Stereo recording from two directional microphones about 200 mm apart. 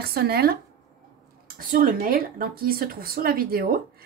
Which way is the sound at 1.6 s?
45° right (ahead or behind).